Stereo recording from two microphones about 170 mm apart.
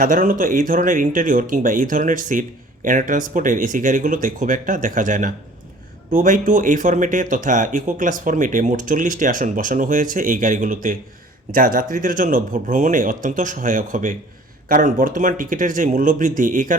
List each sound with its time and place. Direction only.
0.0 s speech: 55° right (ahead or behind)